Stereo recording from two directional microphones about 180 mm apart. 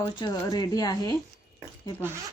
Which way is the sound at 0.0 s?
20° left (ahead or behind).